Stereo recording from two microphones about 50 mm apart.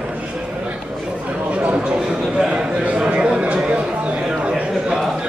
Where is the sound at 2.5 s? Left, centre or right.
Right.